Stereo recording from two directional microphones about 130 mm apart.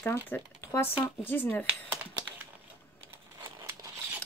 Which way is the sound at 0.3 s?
20° left (ahead or behind).